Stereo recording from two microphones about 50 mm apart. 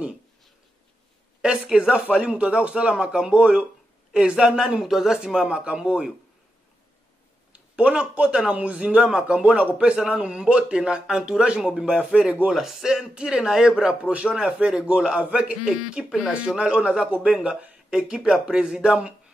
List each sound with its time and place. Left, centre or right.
1.4 s speech: centre
7.5 s speech: right
9.4 s speech: right
12.5 s speech: centre